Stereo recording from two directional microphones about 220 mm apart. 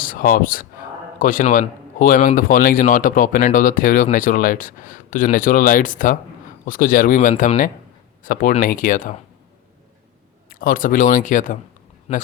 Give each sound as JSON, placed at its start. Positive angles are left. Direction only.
{"t": 0.0, "sound": "a man's voice", "side_deg": 40}
{"t": 10.5, "sound": "a man's voice", "side_deg": 40}
{"t": 12.1, "sound": "speech", "side_deg": 25}